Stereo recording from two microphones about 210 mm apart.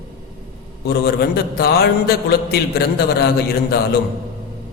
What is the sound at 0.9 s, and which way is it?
A man's voice, 50° left (ahead or behind).